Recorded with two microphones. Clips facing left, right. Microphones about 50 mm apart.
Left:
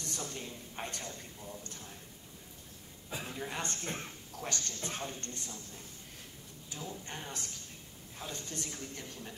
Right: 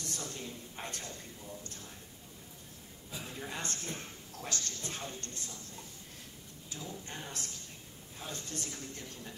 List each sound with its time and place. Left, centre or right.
0.1 s a woman's voice: left
3.1 s a woman's voice: left
6.7 s a woman's voice: left